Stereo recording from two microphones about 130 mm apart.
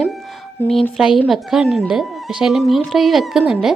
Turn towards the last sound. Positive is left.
turn(degrees=-5)  # may be behind; listen again after turning